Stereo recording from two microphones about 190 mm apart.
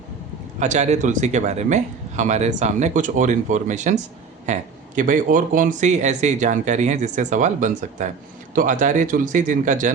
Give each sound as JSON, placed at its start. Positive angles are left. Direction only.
{"t": 0.6, "sound": "speech", "side_deg": -40}